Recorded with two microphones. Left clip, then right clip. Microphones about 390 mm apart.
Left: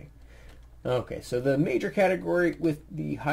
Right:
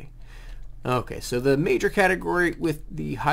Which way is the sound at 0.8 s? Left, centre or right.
Right.